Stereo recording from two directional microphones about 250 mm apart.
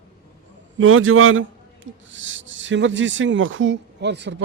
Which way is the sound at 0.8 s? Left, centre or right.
Right.